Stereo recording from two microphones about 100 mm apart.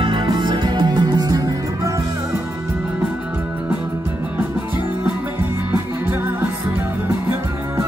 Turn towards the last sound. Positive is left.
turn(degrees=-20)  # may be behind; listen again after turning